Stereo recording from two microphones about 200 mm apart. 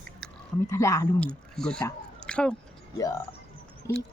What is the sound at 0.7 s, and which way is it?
Speech, 15° left (ahead or behind).